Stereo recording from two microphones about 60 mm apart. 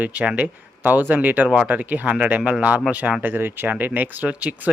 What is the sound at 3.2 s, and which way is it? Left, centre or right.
Speech, right.